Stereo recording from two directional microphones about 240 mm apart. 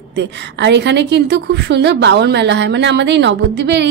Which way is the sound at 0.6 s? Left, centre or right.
Right.